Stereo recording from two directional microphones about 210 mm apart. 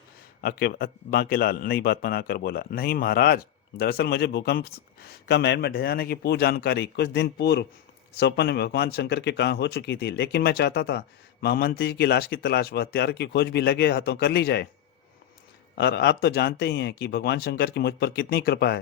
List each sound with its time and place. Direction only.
0.4 s a man's voice: 45° left (ahead or behind)
15.8 s a man's voice: 50° left (ahead or behind)